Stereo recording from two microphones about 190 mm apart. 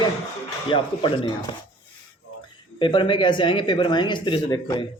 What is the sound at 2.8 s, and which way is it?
Speech, 25° left (ahead or behind).